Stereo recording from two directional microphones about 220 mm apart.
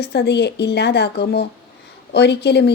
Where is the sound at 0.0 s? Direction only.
50° left (ahead or behind).